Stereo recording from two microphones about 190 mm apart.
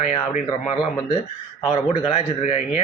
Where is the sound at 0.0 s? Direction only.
40° left (ahead or behind).